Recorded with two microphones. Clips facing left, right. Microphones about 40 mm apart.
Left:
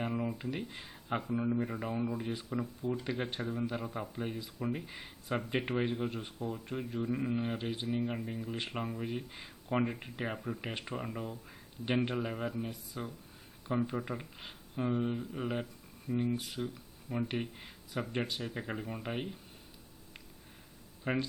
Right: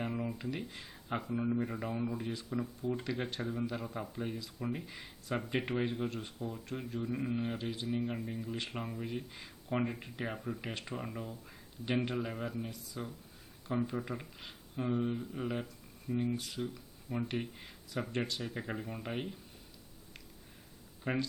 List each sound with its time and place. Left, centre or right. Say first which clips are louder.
0.0 s a sound: left 2 dB; centre
1.2 s speech: even; centre
3.4 s speech: left 1 dB; centre; by 7.9 s left
7.9 s speech: left 1 dB; centre
8.4 s speech: left 2 dB; centre
12.7 s speech: left 1 dB; left
13.7 s speech: left 1 dB; centre
21.1 s speech: left 1 dB; centre